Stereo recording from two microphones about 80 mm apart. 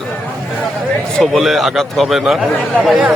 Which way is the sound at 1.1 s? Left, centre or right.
Centre.